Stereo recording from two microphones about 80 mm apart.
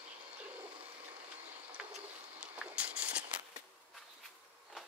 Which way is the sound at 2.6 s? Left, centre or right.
Centre.